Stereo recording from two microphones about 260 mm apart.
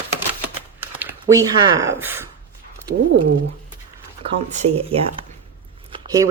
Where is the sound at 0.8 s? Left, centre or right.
Centre.